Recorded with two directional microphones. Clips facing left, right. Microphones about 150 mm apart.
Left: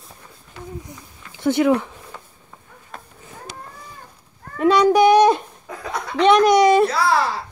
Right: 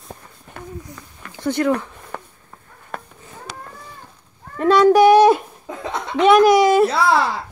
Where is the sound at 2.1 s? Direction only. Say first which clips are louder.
Right 7 dB; 60° right (ahead or behind).